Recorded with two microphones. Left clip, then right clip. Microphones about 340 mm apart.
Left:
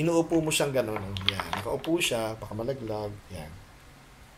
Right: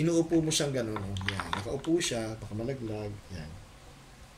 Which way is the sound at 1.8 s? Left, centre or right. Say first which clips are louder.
Left 2 dB; left.